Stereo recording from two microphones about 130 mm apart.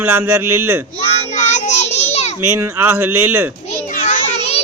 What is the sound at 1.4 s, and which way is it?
Child singing, 65° left (ahead or behind).